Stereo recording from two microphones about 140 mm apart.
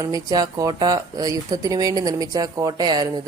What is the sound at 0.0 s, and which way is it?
Mantra, 25° right (ahead or behind).